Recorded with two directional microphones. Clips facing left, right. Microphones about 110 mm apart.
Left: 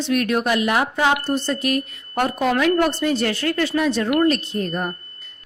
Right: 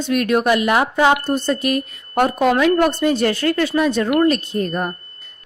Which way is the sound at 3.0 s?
50° right (ahead or behind).